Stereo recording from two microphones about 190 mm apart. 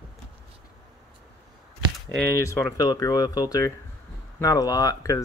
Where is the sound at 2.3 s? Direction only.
15° left (ahead or behind).